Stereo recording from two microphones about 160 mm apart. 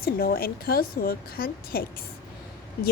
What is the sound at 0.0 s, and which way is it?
Speech, 70° left (ahead or behind).